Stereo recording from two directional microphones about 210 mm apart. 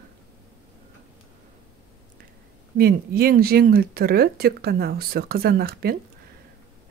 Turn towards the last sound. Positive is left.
turn(degrees=-45)  # may be behind; listen again after turning